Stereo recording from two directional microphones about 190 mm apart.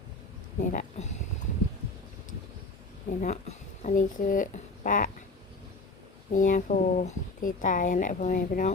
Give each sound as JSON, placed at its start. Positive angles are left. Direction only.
{"t": 0.6, "sound": "speech", "side_deg": 40}
{"t": 3.2, "sound": "a woman's voice", "side_deg": 40}
{"t": 6.3, "sound": "speech", "side_deg": 45}